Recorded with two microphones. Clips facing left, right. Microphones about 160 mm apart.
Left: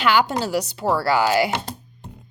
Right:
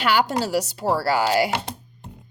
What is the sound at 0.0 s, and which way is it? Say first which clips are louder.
Speech: left 1 dB; 40° right (ahead or behind).